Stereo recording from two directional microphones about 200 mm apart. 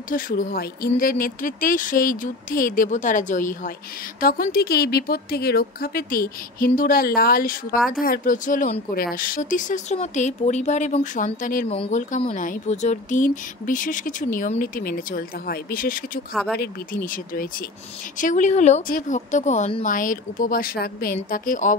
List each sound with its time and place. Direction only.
0.1 s speech: 45° left (ahead or behind)